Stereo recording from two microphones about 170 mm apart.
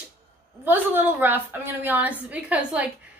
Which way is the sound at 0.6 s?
10° right (ahead or behind).